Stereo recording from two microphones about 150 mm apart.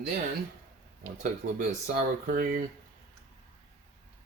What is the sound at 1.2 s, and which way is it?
Speech, 55° right (ahead or behind).